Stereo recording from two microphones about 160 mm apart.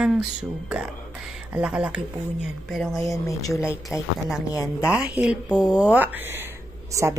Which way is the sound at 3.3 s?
20° left (ahead or behind).